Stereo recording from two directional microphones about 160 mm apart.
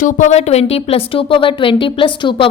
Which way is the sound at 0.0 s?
50° left (ahead or behind).